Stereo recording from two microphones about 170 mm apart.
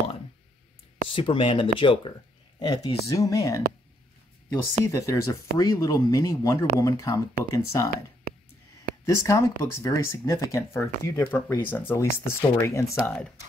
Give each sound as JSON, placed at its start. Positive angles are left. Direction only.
{"t": 1.0, "sound": "speech", "side_deg": 30}
{"t": 7.9, "sound": "a sound", "side_deg": -65}
{"t": 9.0, "sound": "speech", "side_deg": 20}